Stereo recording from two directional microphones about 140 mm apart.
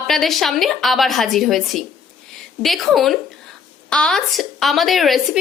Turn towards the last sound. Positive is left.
turn(degrees=0)  # may be behind; listen again after turning